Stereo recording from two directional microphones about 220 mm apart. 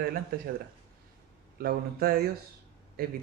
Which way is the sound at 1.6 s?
45° right (ahead or behind).